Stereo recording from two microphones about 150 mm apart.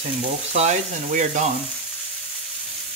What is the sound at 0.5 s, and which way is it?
Speech, 50° right (ahead or behind).